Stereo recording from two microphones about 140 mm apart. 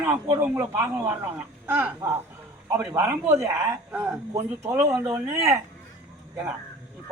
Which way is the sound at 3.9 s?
10° right (ahead or behind).